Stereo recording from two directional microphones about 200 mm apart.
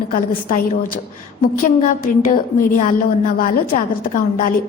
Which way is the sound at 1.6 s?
40° left (ahead or behind).